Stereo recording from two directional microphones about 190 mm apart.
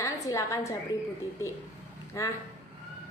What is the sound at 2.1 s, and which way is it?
Speech, 15° left (ahead or behind).